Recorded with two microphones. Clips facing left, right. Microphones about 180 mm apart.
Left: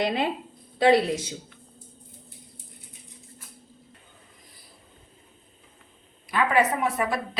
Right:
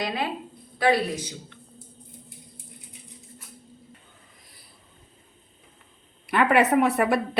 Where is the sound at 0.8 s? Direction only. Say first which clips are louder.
Left 3 dB; 25° left (ahead or behind).